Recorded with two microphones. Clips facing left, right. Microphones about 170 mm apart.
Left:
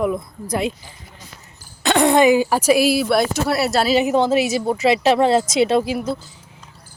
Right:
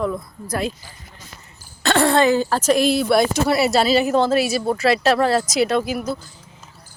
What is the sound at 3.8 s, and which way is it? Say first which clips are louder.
Speech: even; 15° left (ahead or behind).